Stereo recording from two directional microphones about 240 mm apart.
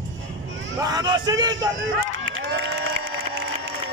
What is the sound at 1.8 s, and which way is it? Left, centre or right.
Crowd, right.